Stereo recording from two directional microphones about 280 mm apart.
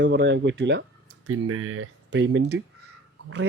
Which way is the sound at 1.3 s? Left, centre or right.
Right.